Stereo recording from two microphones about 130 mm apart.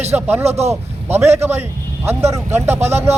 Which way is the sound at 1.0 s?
15° right (ahead or behind).